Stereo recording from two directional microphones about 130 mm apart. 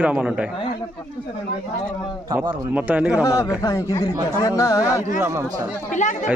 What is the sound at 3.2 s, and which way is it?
Speech, 25° left (ahead or behind).